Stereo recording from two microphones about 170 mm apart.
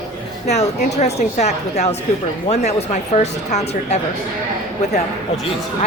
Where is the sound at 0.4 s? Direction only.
40° left (ahead or behind).